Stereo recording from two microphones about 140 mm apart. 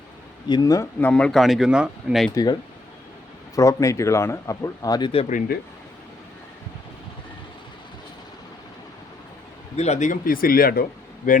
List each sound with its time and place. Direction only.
0.4 s speech: 30° left (ahead or behind)
0.9 s speech: 10° left (ahead or behind); by 2.2 s 5° right (ahead or behind)
2.3 s speech: 30° left (ahead or behind)
9.7 s speech: 55° left (ahead or behind); by 10.8 s 90° left
11.2 s speech: 75° left (ahead or behind)